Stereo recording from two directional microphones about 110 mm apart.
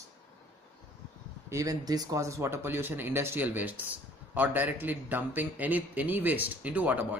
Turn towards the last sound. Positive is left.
turn(degrees=-15)  # may be behind; listen again after turning